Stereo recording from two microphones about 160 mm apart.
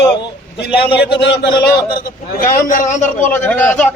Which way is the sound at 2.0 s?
60° left (ahead or behind).